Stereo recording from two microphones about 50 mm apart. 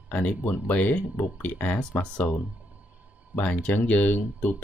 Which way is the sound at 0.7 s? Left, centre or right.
Left.